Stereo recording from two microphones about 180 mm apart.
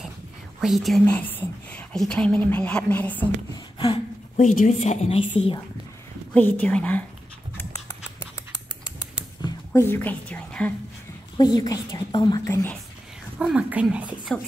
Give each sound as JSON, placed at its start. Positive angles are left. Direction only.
{"t": 0.6, "sound": "speech", "side_deg": 0}
{"t": 3.5, "sound": "a sound", "side_deg": 25}
{"t": 4.4, "sound": "a woman's voice", "side_deg": 45}
{"t": 6.3, "sound": "a woman's voice", "side_deg": 10}
{"t": 8.2, "sound": "rodents", "side_deg": 15}
{"t": 11.3, "sound": "a woman's voice", "side_deg": 20}
{"t": 13.4, "sound": "a woman's voice", "side_deg": -5}